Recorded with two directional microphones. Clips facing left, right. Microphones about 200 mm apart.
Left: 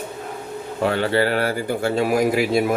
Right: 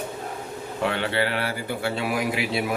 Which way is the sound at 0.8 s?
40° left (ahead or behind).